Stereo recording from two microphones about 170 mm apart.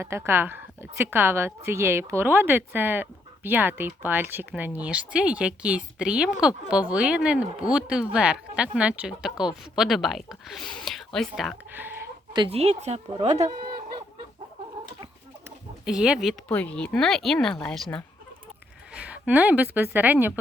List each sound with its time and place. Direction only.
0.0 s a woman's voice: 15° right (ahead or behind); by 11.5 s centre (ahead or behind)
11.7 s chicken: 10° right (ahead or behind)
12.3 s speech: 25° right (ahead or behind)
12.5 s speech: 40° right (ahead or behind)
13.7 s fowl: 25° right (ahead or behind)
15.4 s bird: 5° right (ahead or behind)
16.5 s speech: 10° left (ahead or behind)
18.9 s a woman's voice: 5° right (ahead or behind)